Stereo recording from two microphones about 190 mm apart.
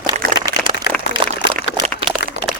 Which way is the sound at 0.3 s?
20° right (ahead or behind).